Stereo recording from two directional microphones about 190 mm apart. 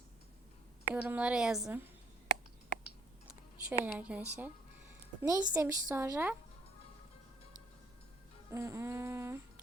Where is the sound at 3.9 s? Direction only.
5° right (ahead or behind).